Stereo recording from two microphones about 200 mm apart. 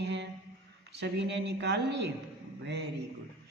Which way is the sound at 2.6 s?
60° right (ahead or behind).